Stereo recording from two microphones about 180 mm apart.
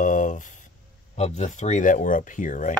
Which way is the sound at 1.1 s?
40° left (ahead or behind).